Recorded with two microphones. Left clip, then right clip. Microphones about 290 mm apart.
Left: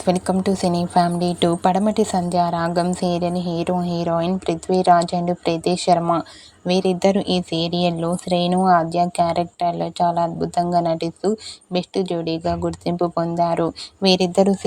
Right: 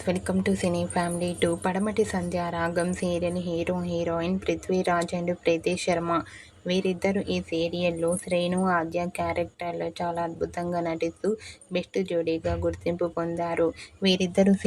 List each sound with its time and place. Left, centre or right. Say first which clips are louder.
0.0 s a woman's voice: left 8 dB; left